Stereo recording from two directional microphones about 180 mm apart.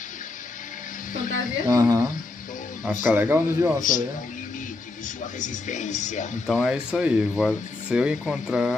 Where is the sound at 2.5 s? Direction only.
45° left (ahead or behind).